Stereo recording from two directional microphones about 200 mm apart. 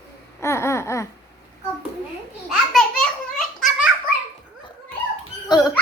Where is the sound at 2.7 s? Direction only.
5° left (ahead or behind).